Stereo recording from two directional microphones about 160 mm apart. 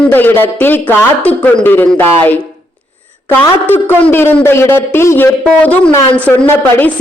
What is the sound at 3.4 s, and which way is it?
Speech, 10° left (ahead or behind).